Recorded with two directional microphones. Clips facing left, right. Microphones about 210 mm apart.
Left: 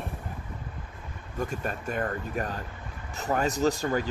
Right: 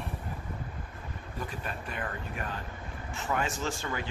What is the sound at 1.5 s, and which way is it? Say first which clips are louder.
Speech: left 6 dB; 45° left (ahead or behind).